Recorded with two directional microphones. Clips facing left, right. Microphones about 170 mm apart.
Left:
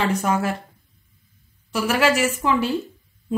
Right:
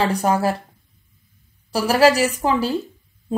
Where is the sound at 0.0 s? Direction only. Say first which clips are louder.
Right 3 dB; 35° right (ahead or behind).